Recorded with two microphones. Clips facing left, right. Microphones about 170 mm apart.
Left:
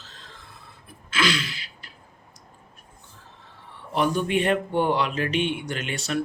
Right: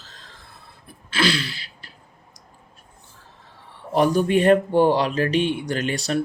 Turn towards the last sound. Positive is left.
turn(degrees=-40)  # may be behind; listen again after turning